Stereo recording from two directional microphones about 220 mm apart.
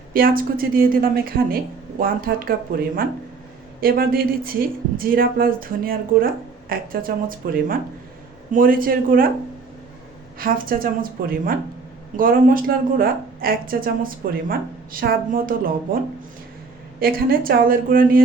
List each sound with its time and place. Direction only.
0.1 s speech: 40° right (ahead or behind)
10.3 s speech: 40° right (ahead or behind)
12.1 s speech: 40° right (ahead or behind)
17.0 s speech: 40° right (ahead or behind)